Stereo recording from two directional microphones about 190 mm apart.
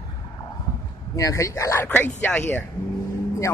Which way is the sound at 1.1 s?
15° left (ahead or behind).